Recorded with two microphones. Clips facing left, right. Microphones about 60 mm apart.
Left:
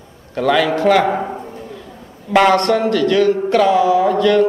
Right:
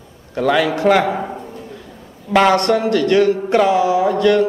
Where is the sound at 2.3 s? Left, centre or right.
Centre.